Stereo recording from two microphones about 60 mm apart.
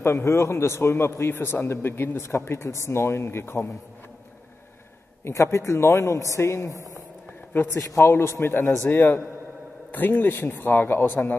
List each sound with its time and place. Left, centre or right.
0.0 s a man's voice: left
5.2 s a man's voice: left
7.5 s speech: left
7.9 s a man's voice: left